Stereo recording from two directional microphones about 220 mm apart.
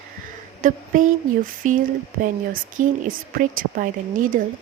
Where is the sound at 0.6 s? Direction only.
35° right (ahead or behind).